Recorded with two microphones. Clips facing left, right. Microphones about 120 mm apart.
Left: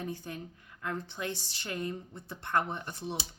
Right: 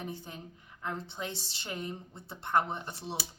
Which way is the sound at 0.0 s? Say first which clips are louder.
Left 3 dB; 20° right (ahead or behind).